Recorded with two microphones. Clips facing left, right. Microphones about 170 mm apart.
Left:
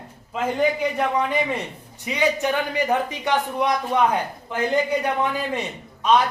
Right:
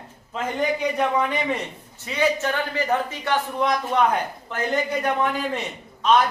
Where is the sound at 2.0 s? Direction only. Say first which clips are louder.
Even; 15° left (ahead or behind).